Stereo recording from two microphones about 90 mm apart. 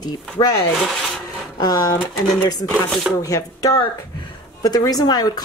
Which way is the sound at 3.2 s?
40° left (ahead or behind).